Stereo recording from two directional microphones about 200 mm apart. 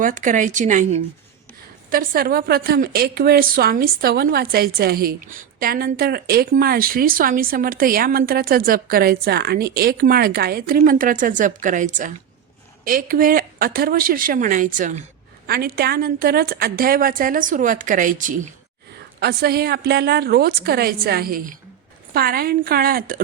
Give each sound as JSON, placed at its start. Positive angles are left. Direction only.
{"t": 0.0, "sound": "speech", "side_deg": -40}
{"t": 1.9, "sound": "a woman's voice", "side_deg": -45}
{"t": 15.4, "sound": "a woman's voice", "side_deg": -50}
{"t": 19.2, "sound": "a woman's voice", "side_deg": -55}